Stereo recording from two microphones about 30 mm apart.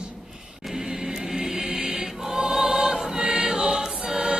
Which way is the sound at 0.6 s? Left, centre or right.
Centre.